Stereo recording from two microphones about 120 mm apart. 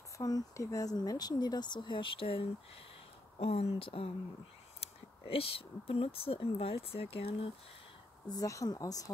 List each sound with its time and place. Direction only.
0.2 s speech: 30° left (ahead or behind); by 7.5 s 50° left (ahead or behind)
8.3 s speech: 30° left (ahead or behind)